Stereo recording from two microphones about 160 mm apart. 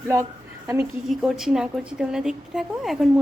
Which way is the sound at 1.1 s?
Centre (ahead or behind).